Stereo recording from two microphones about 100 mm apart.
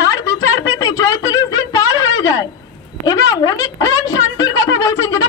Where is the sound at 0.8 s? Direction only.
35° left (ahead or behind).